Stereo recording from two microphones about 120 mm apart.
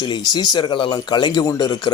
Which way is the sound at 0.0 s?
35° left (ahead or behind).